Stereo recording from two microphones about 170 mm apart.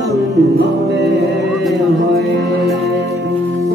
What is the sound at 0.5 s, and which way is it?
Music, 85° right.